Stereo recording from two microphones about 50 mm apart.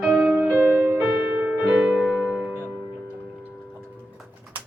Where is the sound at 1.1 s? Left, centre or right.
Centre.